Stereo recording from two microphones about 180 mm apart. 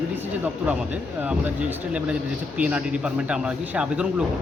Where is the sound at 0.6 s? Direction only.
10° right (ahead or behind).